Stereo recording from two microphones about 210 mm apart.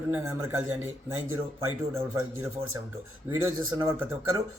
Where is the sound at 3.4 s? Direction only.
15° right (ahead or behind).